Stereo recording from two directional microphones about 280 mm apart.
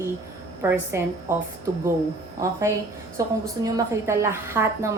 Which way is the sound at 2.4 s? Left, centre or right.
Centre.